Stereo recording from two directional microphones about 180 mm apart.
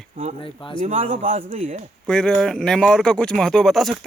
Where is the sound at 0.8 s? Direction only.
40° right (ahead or behind).